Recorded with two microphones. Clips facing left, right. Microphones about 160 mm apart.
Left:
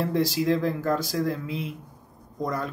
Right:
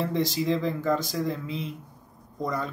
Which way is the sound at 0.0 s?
5° left (ahead or behind).